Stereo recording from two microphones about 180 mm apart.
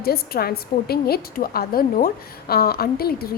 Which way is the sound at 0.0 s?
60° left (ahead or behind).